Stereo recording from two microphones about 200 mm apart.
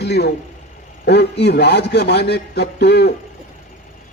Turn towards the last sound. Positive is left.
turn(degrees=55)  # may be behind; listen again after turning